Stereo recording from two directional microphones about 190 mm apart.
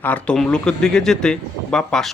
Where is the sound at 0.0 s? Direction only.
5° left (ahead or behind).